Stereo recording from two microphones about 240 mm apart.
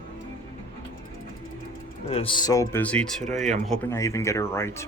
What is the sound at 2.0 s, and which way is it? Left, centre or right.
Speech, left.